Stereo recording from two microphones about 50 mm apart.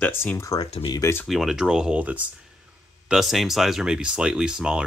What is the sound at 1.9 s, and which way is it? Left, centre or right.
Speech, right.